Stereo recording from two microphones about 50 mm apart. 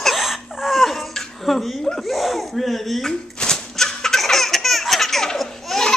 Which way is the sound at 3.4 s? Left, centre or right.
Centre.